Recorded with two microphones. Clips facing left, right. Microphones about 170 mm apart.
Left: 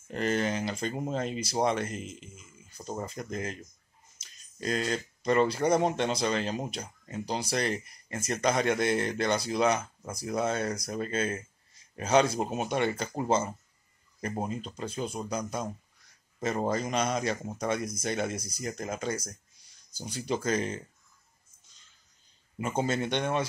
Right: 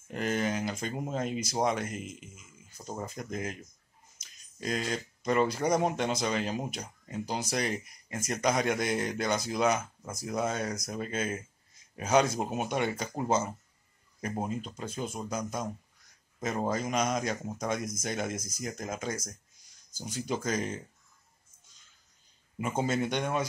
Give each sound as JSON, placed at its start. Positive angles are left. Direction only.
{"t": 0.1, "sound": "a man's voice", "side_deg": -5}
{"t": 18.3, "sound": "speech", "side_deg": -45}
{"t": 18.6, "sound": "speech", "side_deg": 0}
{"t": 20.0, "sound": "speech", "side_deg": 10}
{"t": 20.4, "sound": "speech", "side_deg": -5}
{"t": 22.6, "sound": "speech", "side_deg": 0}